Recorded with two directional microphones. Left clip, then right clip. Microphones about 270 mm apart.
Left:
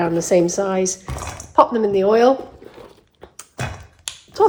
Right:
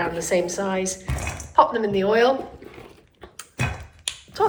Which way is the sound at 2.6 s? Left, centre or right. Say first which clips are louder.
Left 2 dB; centre.